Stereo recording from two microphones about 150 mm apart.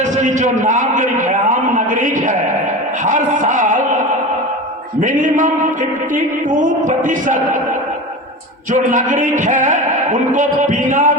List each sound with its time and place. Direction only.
0.0 s a man's voice: 55° right (ahead or behind)
3.0 s a sound: 60° right (ahead or behind)
4.9 s a man's voice: 55° right (ahead or behind)
8.7 s a man's voice: 60° right (ahead or behind)